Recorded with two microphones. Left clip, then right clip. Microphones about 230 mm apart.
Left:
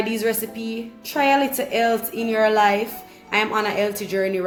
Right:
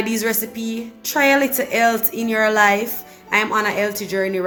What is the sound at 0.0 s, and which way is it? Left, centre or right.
Speech, centre.